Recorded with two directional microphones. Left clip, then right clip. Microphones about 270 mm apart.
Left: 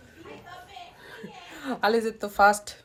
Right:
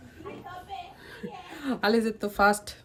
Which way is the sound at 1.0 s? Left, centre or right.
Centre.